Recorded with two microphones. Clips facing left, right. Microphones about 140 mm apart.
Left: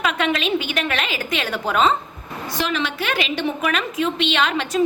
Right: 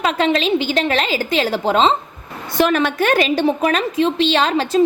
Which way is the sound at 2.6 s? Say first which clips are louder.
Right 8 dB; 50° right (ahead or behind).